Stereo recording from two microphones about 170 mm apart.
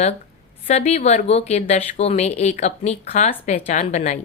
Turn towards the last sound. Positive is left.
turn(degrees=45)  # may be behind; listen again after turning